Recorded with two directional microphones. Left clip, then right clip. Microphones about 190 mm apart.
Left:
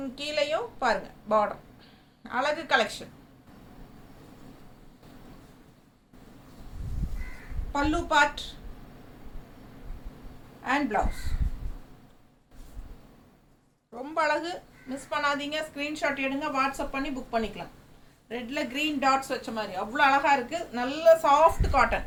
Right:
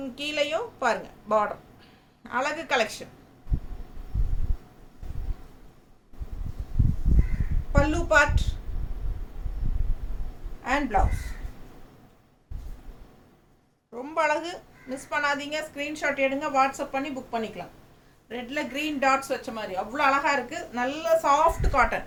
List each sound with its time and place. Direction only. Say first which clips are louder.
0.2 s a woman's voice: right 1 dB; 15° right (ahead or behind)
7.9 s a woman's voice: right 2 dB; 10° right (ahead or behind)
10.6 s a woman's voice: right 2 dB; 10° right (ahead or behind)
13.9 s a woman's voice: right 2 dB; 20° right (ahead or behind)